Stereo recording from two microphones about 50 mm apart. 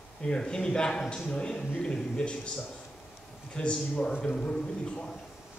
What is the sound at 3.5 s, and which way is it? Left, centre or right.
A man's voice, left.